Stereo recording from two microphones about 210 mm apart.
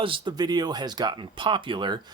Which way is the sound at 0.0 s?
25° right (ahead or behind).